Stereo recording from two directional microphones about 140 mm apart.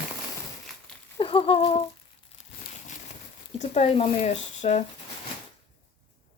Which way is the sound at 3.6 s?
55° left (ahead or behind).